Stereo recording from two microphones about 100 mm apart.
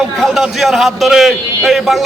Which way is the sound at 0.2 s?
Centre (ahead or behind).